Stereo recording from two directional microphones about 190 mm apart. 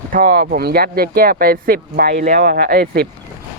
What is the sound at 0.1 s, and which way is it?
Speech, 50° right (ahead or behind).